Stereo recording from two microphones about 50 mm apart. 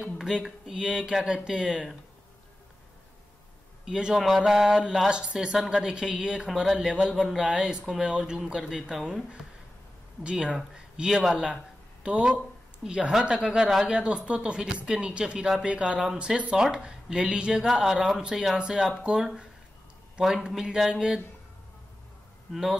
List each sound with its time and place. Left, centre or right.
0.0 s a woman's voice: centre
3.8 s a woman's voice: centre
20.4 s a woman's voice: centre